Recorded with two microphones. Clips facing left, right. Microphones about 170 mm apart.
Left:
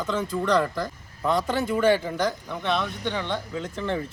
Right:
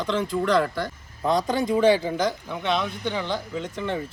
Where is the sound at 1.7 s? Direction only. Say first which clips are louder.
Right 3 dB; centre (ahead or behind).